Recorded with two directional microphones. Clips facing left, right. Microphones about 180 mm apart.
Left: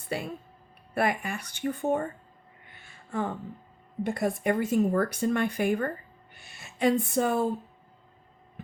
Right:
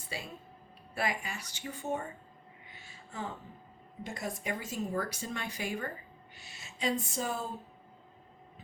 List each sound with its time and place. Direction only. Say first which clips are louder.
0.1 s speech: left 10 dB; 60° left (ahead or behind)
2.6 s a sound: left 7 dB; 55° left (ahead or behind)
4.0 s speech: left 11 dB; 60° left (ahead or behind)